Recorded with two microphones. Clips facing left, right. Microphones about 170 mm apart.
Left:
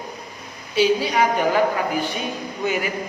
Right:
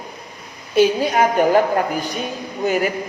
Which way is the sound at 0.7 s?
50° right (ahead or behind).